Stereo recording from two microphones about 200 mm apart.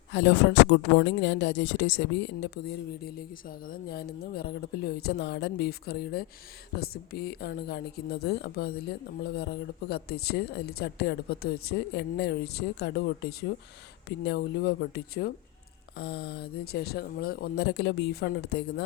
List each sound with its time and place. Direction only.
0.1 s a woman's voice: 60° left (ahead or behind)